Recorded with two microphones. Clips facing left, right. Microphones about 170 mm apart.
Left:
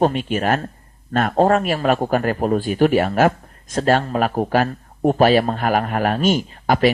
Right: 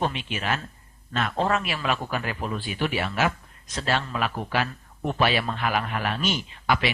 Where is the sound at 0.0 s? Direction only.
45° left (ahead or behind).